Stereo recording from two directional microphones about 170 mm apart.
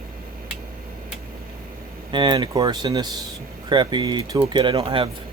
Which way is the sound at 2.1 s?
25° right (ahead or behind).